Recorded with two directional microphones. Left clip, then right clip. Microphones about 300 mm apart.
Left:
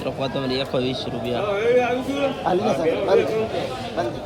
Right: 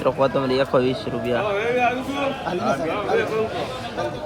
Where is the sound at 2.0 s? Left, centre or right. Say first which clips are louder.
Left 2 dB; centre.